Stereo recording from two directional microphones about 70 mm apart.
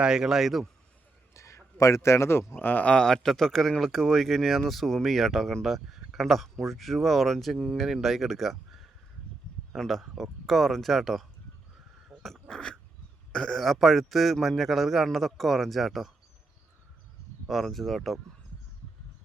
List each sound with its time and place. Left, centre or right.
0.0 s speech: centre
1.3 s a sound: left
2.6 s speech: left; by 11.3 s centre
12.2 s crow: centre
13.3 s speech: centre
17.4 s speech: centre